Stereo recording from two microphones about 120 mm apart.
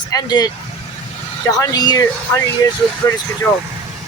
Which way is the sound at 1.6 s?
35° left (ahead or behind).